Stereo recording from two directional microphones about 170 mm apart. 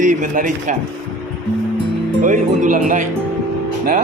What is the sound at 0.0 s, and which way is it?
Speech, 50° right (ahead or behind).